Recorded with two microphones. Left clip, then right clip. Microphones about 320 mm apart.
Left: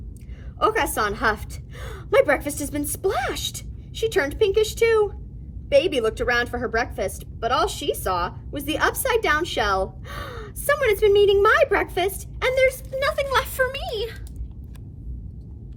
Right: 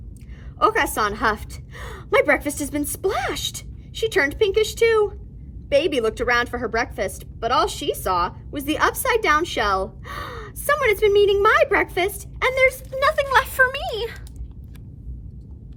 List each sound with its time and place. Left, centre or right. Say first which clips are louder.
0.6 s a woman's voice: right 2 dB; centre